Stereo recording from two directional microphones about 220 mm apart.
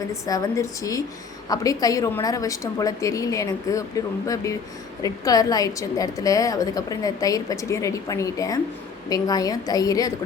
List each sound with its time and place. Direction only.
0.1 s a woman's voice: 15° left (ahead or behind)